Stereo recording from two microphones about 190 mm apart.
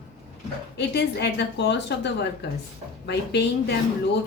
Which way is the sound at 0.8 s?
60° left (ahead or behind).